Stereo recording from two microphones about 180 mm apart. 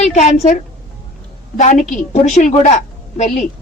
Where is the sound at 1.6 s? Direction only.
40° left (ahead or behind).